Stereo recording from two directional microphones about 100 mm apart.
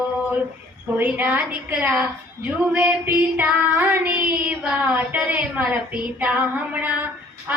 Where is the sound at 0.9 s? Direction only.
15° right (ahead or behind).